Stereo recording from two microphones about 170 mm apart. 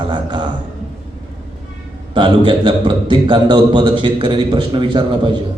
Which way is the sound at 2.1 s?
30° right (ahead or behind).